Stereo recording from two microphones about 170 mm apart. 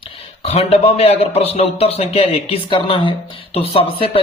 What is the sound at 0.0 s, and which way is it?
A man's voice, 35° left (ahead or behind).